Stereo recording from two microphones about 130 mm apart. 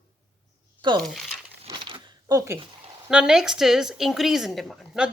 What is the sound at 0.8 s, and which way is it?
Speech, 35° right (ahead or behind).